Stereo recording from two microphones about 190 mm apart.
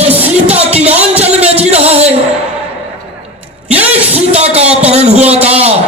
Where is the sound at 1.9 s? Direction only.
35° right (ahead or behind).